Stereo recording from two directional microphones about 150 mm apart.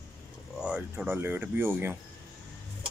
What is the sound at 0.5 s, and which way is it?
Speech, 5° right (ahead or behind).